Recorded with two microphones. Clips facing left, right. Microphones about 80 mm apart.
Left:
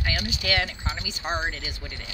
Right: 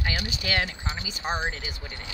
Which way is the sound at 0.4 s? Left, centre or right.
Right.